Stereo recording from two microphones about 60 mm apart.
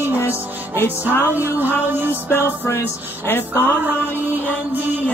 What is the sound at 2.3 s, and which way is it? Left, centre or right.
Music, left.